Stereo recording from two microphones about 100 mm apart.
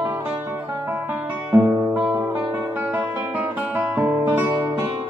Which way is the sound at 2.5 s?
20° right (ahead or behind).